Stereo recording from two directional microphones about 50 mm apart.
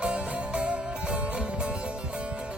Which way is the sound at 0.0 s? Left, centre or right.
Right.